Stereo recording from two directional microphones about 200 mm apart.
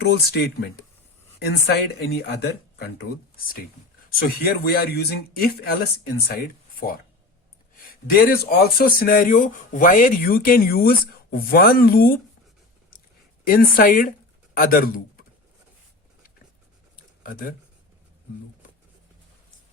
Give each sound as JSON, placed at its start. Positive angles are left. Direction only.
{"t": 0.0, "sound": "speech", "side_deg": 55}
{"t": 4.2, "sound": "speech", "side_deg": 50}
{"t": 8.1, "sound": "speech", "side_deg": 50}
{"t": 13.5, "sound": "speech", "side_deg": 45}
{"t": 17.2, "sound": "speech", "side_deg": 45}